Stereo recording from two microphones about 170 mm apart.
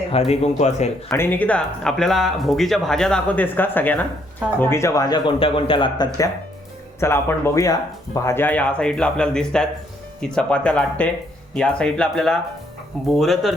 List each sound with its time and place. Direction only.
0.3 s speech: 40° left (ahead or behind)
1.1 s speech: 10° left (ahead or behind); by 6.1 s 30° left (ahead or behind)
7.0 s speech: 15° left (ahead or behind)